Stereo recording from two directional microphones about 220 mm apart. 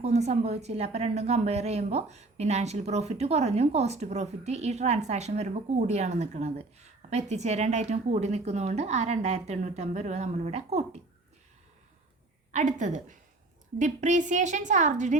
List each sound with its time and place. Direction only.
0.0 s a woman's voice: 30° right (ahead or behind)
12.5 s a woman's voice: 35° right (ahead or behind)